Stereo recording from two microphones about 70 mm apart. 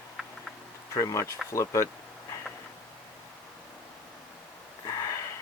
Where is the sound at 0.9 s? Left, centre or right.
Left.